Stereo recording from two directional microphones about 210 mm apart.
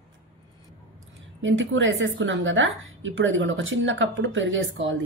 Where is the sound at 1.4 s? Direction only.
65° right (ahead or behind).